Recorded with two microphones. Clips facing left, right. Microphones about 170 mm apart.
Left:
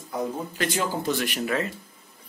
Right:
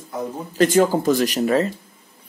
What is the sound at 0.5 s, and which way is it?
Speech, 45° right (ahead or behind).